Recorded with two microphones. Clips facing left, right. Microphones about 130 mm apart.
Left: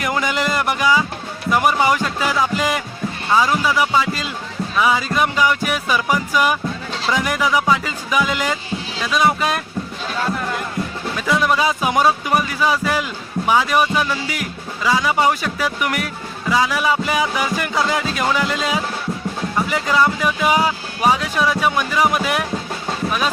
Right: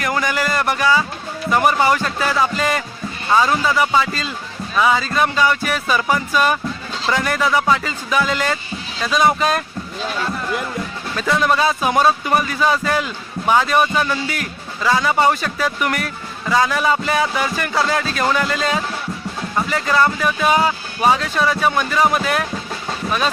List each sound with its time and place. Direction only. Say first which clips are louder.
0.0 s speech: even; 20° left (ahead or behind)
9.0 s speech: right 2 dB; 5° left (ahead or behind)
11.2 s speech: right 1 dB; 10° left (ahead or behind)